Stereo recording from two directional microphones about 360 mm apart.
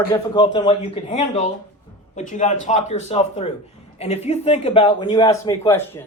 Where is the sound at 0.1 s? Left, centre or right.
Centre.